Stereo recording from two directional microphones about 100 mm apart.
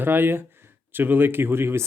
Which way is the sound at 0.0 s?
20° right (ahead or behind).